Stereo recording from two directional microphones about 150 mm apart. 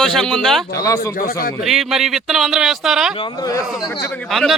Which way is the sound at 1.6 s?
Centre (ahead or behind).